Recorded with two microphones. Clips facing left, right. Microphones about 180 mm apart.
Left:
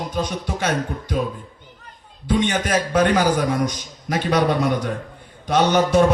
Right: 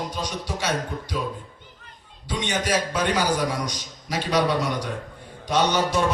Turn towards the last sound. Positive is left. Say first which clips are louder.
# left 6 dB
turn(degrees=55)  # may be behind; listen again after turning